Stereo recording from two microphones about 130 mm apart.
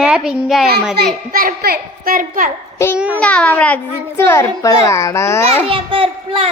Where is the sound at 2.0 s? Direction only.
90° right.